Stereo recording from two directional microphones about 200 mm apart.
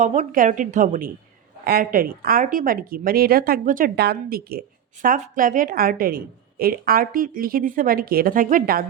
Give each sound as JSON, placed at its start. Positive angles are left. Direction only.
{"t": 0.0, "sound": "a woman's voice", "side_deg": -35}